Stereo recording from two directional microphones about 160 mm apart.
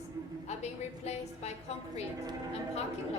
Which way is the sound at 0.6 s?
45° left (ahead or behind).